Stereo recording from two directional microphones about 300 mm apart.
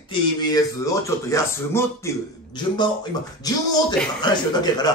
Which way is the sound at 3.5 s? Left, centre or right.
Centre.